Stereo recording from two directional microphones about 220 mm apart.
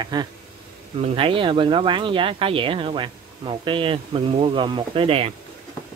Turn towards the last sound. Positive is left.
turn(degrees=-25)  # may be behind; listen again after turning